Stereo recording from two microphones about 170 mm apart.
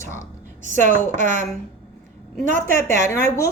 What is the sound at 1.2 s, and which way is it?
Speech, 45° right (ahead or behind).